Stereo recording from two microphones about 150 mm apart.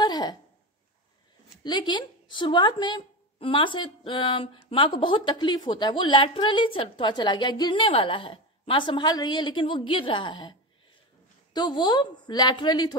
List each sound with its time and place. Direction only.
0.0 s a sound: 30° left (ahead or behind)
1.6 s speech: 30° left (ahead or behind)
11.5 s a woman's voice: 30° left (ahead or behind)